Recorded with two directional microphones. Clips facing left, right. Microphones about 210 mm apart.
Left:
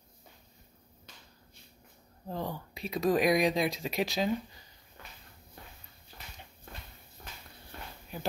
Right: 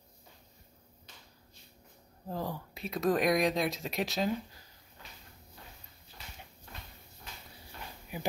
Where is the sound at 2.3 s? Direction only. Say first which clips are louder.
Even; centre (ahead or behind).